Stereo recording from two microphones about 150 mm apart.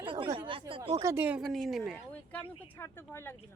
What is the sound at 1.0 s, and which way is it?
Speech, 15° right (ahead or behind).